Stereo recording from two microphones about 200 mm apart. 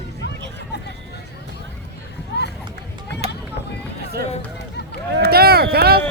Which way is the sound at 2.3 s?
60° left (ahead or behind).